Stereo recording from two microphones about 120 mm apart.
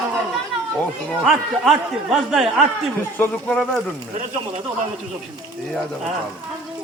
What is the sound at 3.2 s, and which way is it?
Speech, 5° left (ahead or behind).